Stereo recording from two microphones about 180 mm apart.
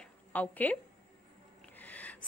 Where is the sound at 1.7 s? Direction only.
10° left (ahead or behind).